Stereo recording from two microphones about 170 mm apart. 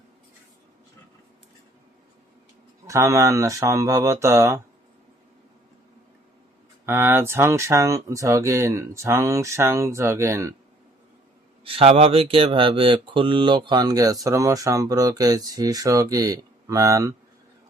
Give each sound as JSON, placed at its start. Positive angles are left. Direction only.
{"t": 2.8, "sound": "speech", "side_deg": -20}
{"t": 6.8, "sound": "speech", "side_deg": -15}
{"t": 11.6, "sound": "speech", "side_deg": -35}